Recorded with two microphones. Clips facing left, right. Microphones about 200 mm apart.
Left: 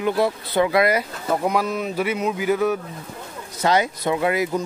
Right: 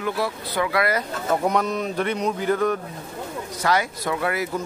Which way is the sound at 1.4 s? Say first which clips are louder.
Left 1 dB; centre (ahead or behind).